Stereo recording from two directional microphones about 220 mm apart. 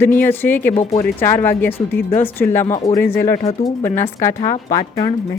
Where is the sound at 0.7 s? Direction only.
30° left (ahead or behind).